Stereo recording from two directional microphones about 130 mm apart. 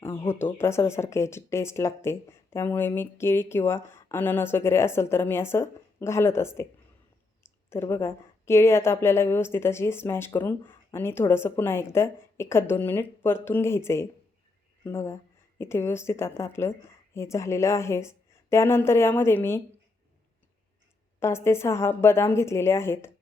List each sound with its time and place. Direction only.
0.0 s a woman's voice: 20° left (ahead or behind)
21.2 s a woman's voice: 20° left (ahead or behind)